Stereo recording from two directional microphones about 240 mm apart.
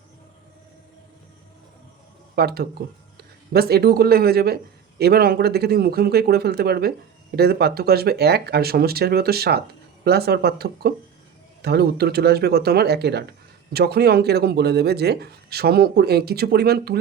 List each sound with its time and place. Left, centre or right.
2.3 s speech: right